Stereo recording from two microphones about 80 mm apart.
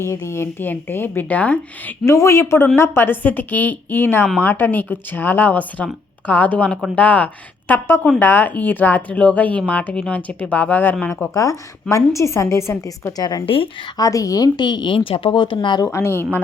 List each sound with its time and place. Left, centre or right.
0.1 s speech: left
2.0 s a woman's voice: left
11.1 s a woman's voice: left
13.1 s speech: left
14.0 s a woman's voice: left
15.8 s a woman's voice: left